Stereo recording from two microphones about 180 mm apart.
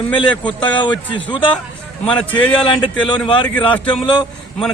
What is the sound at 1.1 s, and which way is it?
Speech, 25° left (ahead or behind).